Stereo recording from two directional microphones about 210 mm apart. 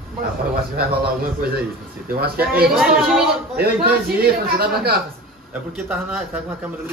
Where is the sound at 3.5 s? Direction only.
50° right (ahead or behind).